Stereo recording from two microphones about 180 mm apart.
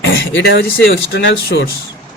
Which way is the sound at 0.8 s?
75° left (ahead or behind).